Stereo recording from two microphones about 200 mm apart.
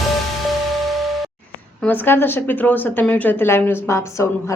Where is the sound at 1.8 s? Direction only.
10° left (ahead or behind).